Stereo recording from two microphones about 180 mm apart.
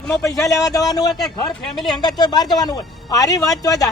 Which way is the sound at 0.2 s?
20° left (ahead or behind).